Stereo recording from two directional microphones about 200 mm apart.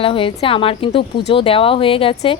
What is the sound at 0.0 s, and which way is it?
Speech, 25° left (ahead or behind).